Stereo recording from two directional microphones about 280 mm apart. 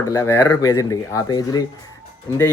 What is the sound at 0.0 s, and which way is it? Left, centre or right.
Speech, centre.